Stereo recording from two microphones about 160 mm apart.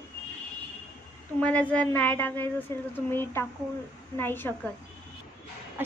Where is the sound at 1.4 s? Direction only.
10° left (ahead or behind).